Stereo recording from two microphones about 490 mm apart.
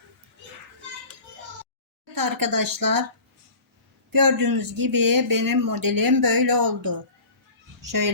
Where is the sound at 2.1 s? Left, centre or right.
Right.